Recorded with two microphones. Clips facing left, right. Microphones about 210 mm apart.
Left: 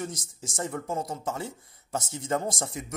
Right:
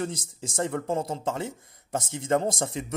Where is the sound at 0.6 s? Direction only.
25° right (ahead or behind).